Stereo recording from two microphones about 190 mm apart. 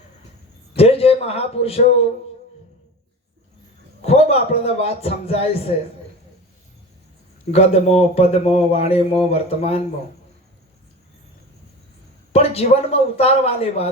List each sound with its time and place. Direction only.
0.8 s a man's voice: 30° left (ahead or behind)
4.0 s speech: 35° left (ahead or behind)
7.5 s speech: 30° left (ahead or behind)
12.3 s speech: 30° left (ahead or behind)